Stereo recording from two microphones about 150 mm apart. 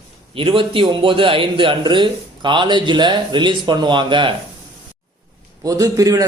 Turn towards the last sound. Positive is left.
turn(degrees=-20)  # may be behind; listen again after turning